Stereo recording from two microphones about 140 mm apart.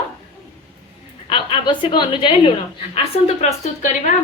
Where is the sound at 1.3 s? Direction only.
35° left (ahead or behind).